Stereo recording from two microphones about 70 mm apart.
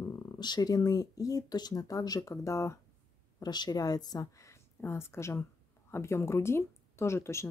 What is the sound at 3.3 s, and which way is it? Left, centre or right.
A woman's voice, left.